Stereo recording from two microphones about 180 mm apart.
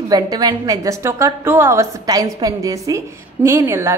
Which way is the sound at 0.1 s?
20° right (ahead or behind).